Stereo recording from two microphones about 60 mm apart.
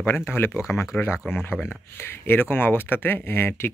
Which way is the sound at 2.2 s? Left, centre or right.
Left.